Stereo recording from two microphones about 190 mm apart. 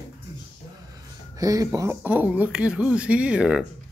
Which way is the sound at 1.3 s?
20° right (ahead or behind).